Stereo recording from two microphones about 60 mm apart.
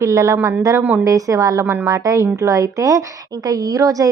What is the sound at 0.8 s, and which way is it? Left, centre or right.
Speech, right.